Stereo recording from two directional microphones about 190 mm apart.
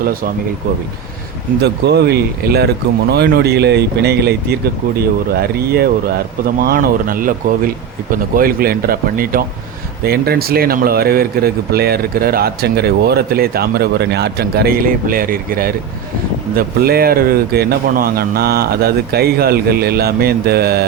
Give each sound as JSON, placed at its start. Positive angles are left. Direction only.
{"t": 0.0, "sound": "speech", "side_deg": -50}
{"t": 1.6, "sound": "speech", "side_deg": -60}